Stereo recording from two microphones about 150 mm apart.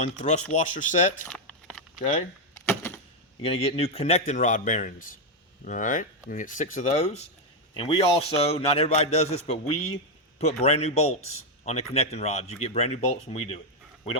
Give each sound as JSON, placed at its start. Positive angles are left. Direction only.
{"t": 0.0, "sound": "a man's voice", "side_deg": 50}
{"t": 1.2, "sound": "a sound", "side_deg": 5}
{"t": 2.0, "sound": "a man's voice", "side_deg": 50}
{"t": 2.6, "sound": "a sound", "side_deg": 15}
{"t": 3.4, "sound": "a man's voice", "side_deg": 40}
{"t": 7.7, "sound": "a man's voice", "side_deg": 35}